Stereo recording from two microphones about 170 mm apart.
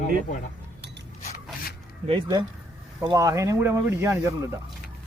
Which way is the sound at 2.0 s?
30° right (ahead or behind).